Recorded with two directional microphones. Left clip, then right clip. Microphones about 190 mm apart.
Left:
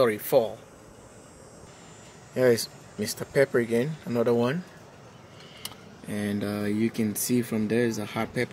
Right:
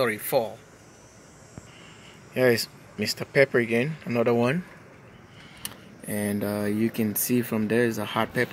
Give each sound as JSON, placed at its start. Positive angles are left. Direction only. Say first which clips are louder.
{"t": 0.0, "sound": "speech", "louder": "left 2 dB", "side_deg": 15}
{"t": 2.3, "sound": "speech", "louder": "even", "side_deg": -10}
{"t": 6.0, "sound": "speech", "louder": "right 2 dB", "side_deg": 0}